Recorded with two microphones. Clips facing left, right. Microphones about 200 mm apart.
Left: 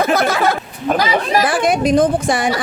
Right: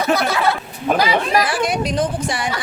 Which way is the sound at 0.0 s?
50° left (ahead or behind).